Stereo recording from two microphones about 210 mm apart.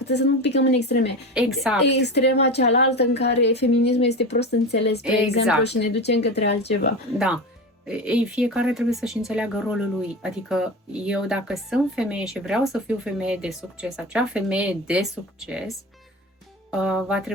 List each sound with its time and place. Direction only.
0.1 s speech: 55° left (ahead or behind)
1.3 s speech: centre (ahead or behind)
1.9 s speech: 55° left (ahead or behind)
7.9 s speech: 5° right (ahead or behind)
16.7 s speech: centre (ahead or behind)